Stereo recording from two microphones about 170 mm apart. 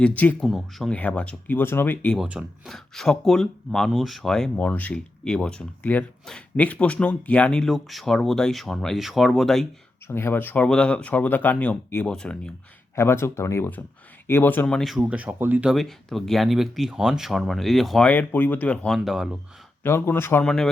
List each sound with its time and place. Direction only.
0.0 s speech: 10° left (ahead or behind)
2.1 s speech: 5° right (ahead or behind)
10.1 s speech: 15° left (ahead or behind)
18.9 s speech: 5° right (ahead or behind)
19.8 s speech: 15° left (ahead or behind)